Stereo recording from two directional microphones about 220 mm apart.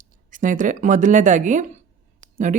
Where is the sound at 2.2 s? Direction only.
35° right (ahead or behind).